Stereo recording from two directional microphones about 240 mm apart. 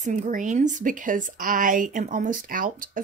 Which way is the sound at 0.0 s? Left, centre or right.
Right.